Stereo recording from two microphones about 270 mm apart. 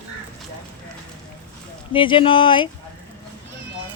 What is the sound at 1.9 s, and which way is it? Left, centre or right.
Speech, centre.